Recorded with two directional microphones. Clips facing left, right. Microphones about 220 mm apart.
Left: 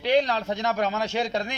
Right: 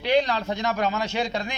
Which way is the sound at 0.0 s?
35° left (ahead or behind).